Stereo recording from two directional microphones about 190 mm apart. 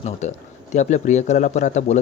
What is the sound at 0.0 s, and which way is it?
Speech, 35° left (ahead or behind).